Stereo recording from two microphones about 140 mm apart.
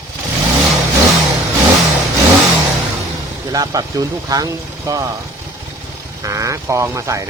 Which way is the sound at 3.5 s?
25° right (ahead or behind).